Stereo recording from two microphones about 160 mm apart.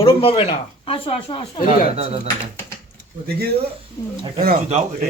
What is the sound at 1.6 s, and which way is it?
Speech, 35° right (ahead or behind).